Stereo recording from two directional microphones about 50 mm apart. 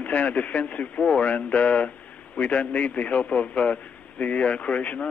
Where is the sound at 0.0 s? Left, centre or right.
Left.